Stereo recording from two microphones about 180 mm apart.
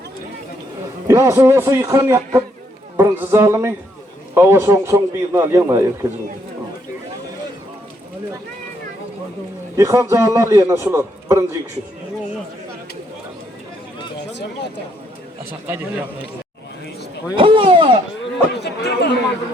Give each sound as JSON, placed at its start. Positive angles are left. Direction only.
{"t": 1.0, "sound": "a man's voice", "side_deg": -15}
{"t": 9.7, "sound": "a man's voice", "side_deg": -15}
{"t": 15.6, "sound": "a man's voice", "side_deg": -10}
{"t": 17.3, "sound": "speech", "side_deg": -30}
{"t": 18.2, "sound": "chatter", "side_deg": 70}